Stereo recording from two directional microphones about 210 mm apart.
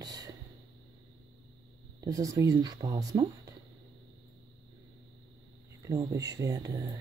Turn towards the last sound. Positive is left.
turn(degrees=-15)  # may be behind; listen again after turning